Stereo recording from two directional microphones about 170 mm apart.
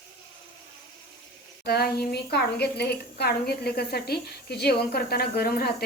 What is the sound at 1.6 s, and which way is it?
A woman's voice, 65° left (ahead or behind).